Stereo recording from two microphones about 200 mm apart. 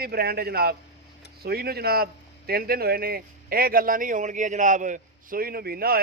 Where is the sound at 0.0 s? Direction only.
50° right (ahead or behind).